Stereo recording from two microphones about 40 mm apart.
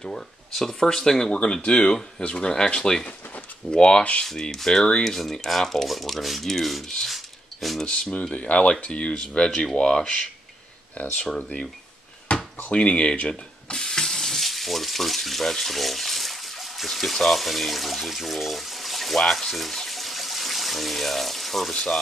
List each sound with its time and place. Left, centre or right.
0.6 s speech: centre
1.3 s speech: left
5.0 s speech: centre
7.8 s speech: left
11.0 s speech: left
12.3 s drawer open or close: left
12.6 s speech: left
13.3 s sink: centre
21.7 s speech: centre